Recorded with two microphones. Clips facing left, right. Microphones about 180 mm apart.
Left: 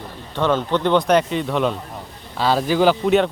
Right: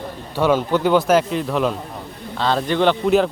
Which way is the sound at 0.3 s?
10° right (ahead or behind).